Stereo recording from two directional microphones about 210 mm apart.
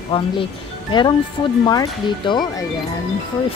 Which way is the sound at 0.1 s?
25° left (ahead or behind).